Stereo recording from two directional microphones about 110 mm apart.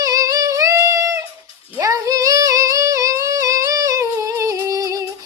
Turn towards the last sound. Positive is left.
turn(degrees=-30)  # may be behind; listen again after turning